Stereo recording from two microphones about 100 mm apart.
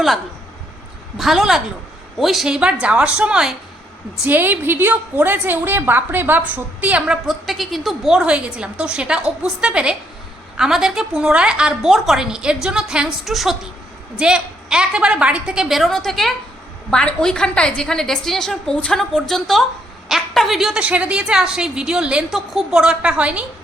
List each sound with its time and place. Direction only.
1.2 s a woman's voice: 5° right (ahead or behind)
4.3 s a woman's voice: 20° right (ahead or behind)
7.1 s a woman's voice: centre (ahead or behind)
15.8 s a woman's voice: 5° left (ahead or behind)
20.8 s a woman's voice: 15° right (ahead or behind)